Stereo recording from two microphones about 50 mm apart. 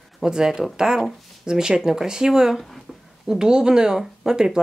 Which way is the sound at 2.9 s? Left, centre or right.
Centre.